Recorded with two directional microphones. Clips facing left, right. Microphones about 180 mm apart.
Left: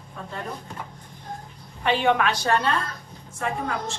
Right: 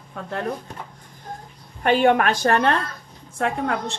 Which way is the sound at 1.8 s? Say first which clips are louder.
Right 4 dB; 45° right (ahead or behind).